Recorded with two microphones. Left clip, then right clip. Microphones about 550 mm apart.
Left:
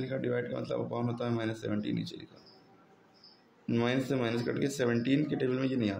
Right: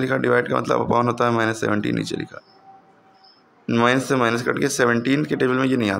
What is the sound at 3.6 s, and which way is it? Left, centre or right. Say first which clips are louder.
Speech: right 13 dB; left.